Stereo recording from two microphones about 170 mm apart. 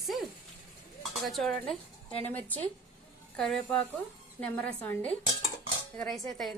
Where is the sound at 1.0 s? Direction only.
Centre (ahead or behind).